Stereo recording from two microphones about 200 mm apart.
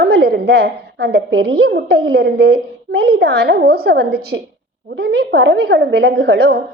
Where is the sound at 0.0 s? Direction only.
55° right (ahead or behind).